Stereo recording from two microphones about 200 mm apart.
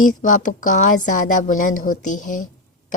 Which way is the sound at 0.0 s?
40° left (ahead or behind).